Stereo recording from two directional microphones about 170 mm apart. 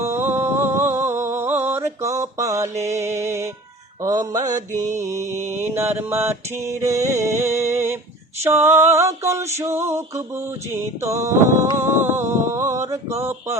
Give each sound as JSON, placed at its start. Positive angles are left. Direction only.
{"t": 0.0, "sound": "music", "side_deg": -15}
{"t": 4.0, "sound": "mantra", "side_deg": -20}
{"t": 4.9, "sound": "a sound", "side_deg": -15}